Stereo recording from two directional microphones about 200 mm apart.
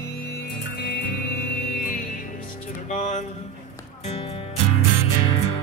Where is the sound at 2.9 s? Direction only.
40° left (ahead or behind).